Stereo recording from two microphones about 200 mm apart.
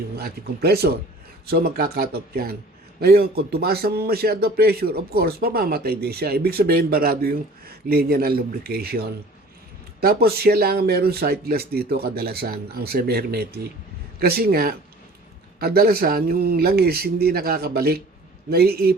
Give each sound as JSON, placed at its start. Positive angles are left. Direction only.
{"t": 0.2, "sound": "speech", "side_deg": -50}